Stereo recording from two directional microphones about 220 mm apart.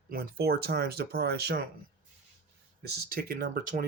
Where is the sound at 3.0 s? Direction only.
40° right (ahead or behind).